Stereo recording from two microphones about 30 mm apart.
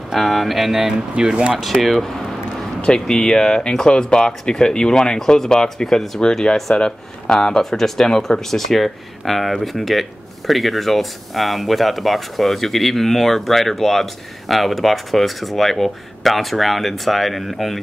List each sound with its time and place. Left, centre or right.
0.1 s speech: centre
1.3 s speech: right
1.6 s speech: centre
2.9 s speech: left
7.7 s speech: centre